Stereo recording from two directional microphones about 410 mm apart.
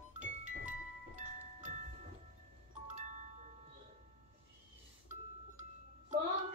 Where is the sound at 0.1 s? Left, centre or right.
Centre.